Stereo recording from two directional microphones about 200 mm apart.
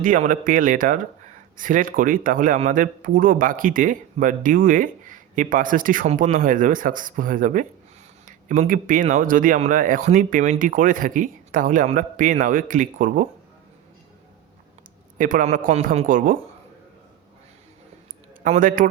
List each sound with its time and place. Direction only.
0.0 s speech: 40° right (ahead or behind)
15.2 s speech: 40° right (ahead or behind)
18.4 s speech: 40° right (ahead or behind)